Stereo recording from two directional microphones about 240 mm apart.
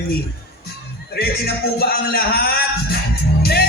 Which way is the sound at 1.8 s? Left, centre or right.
Left.